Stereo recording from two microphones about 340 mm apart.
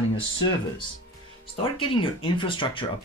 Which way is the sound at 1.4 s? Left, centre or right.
Centre.